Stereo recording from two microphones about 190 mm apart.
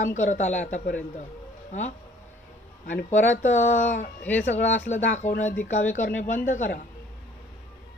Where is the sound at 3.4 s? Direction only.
40° left (ahead or behind).